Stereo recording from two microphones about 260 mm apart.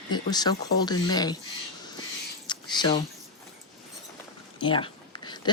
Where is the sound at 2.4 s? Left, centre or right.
Centre.